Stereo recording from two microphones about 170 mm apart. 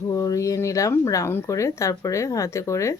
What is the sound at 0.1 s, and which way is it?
Speech, 20° left (ahead or behind).